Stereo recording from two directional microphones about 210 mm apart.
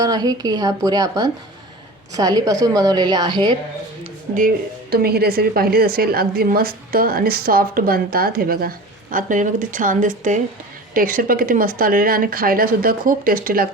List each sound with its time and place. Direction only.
0.0 s a woman's voice: 20° right (ahead or behind)
4.4 s speech: 45° right (ahead or behind)